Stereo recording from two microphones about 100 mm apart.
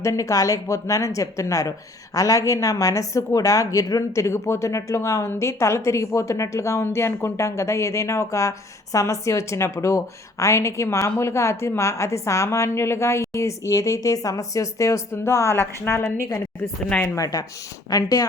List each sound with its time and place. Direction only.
0.0 s a woman's voice: 30° left (ahead or behind)
17.2 s a woman's voice: 40° left (ahead or behind)